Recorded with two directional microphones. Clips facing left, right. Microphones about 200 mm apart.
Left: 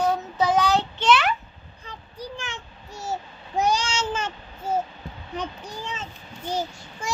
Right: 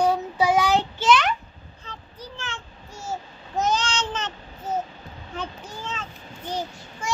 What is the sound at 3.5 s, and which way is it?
Babbling, 10° left (ahead or behind).